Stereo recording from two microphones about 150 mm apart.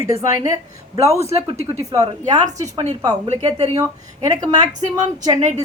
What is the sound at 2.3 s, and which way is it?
Speech, 50° right (ahead or behind).